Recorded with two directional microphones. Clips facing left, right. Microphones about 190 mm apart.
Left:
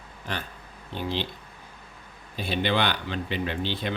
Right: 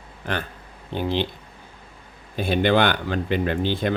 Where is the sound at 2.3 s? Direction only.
50° right (ahead or behind).